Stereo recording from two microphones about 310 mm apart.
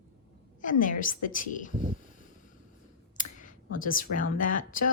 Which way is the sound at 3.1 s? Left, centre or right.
Left.